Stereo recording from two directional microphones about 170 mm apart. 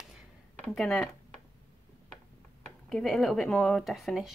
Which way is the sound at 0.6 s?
5° left (ahead or behind).